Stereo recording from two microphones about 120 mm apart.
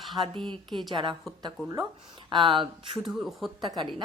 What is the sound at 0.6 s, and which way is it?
Speech, centre (ahead or behind).